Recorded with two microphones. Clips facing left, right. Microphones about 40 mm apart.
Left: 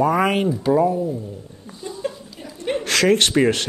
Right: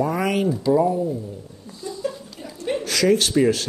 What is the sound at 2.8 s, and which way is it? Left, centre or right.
Speech, left.